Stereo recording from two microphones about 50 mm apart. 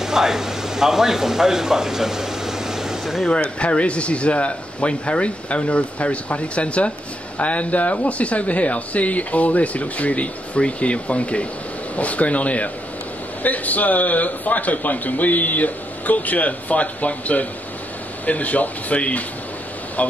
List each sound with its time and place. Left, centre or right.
0.0 s speech: centre
3.3 s a man's voice: left